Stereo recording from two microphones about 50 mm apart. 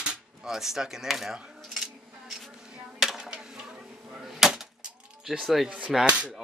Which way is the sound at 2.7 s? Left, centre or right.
Centre.